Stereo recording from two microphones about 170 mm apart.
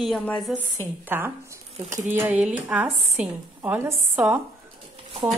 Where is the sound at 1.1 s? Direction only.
10° right (ahead or behind).